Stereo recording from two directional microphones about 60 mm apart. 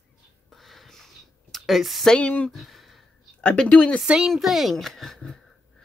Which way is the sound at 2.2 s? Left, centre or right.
Left.